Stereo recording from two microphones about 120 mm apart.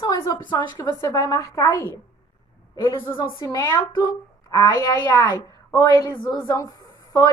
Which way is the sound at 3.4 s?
30° left (ahead or behind).